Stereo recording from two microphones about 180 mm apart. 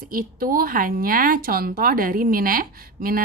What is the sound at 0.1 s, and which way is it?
Speech, 50° right (ahead or behind).